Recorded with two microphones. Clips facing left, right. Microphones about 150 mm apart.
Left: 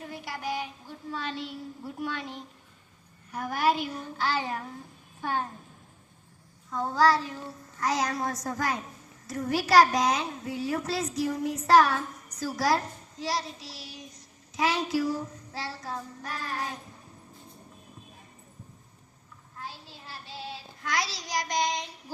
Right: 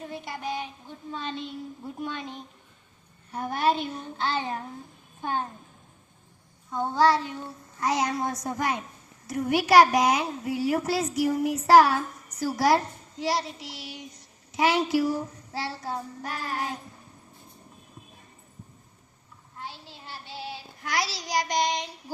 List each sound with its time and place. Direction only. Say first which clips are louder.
0.0 s child singing: right 1 dB; 25° right (ahead or behind)
6.7 s child singing: right 2 dB; 25° right (ahead or behind)
11.5 s a child's voice: right 3 dB; 25° right (ahead or behind)
14.5 s child singing: right 4 dB; 25° right (ahead or behind)
19.5 s child singing: right 1 dB; 30° right (ahead or behind)